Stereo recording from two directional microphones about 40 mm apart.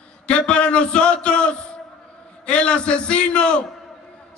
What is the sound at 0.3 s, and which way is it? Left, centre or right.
A man's voice, left.